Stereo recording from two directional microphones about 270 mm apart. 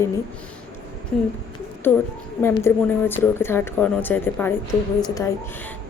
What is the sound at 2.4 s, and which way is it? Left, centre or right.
A woman's voice, centre.